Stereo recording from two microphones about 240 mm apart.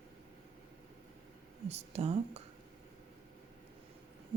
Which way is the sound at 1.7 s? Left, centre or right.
Right.